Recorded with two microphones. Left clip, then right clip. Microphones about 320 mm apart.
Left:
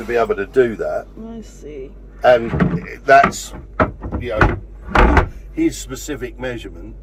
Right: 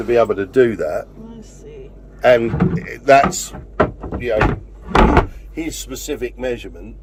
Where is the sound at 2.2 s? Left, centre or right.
Right.